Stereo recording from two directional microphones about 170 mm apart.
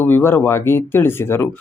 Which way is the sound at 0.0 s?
15° left (ahead or behind).